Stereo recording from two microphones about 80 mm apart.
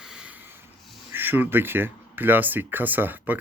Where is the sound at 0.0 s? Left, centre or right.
Centre.